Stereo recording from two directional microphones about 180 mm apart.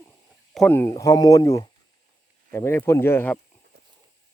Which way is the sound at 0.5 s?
5° left (ahead or behind).